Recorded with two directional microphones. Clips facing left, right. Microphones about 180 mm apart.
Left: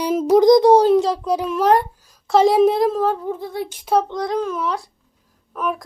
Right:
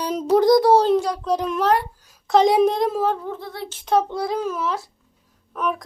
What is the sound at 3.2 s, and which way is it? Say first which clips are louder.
Speech: left 5 dB; 15° left (ahead or behind).